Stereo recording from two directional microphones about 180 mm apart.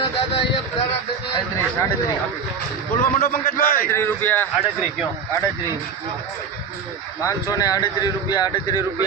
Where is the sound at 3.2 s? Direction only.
55° left (ahead or behind).